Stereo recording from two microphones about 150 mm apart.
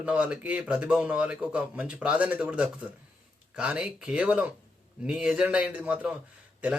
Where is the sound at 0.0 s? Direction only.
5° right (ahead or behind).